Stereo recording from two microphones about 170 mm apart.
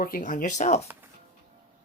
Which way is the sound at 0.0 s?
50° left (ahead or behind).